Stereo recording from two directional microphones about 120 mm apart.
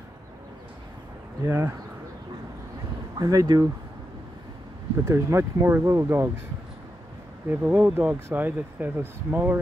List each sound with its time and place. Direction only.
1.4 s speech: 15° right (ahead or behind)
3.2 s speech: 30° right (ahead or behind)
5.0 s speech: 20° right (ahead or behind)
7.4 s speech: 10° right (ahead or behind)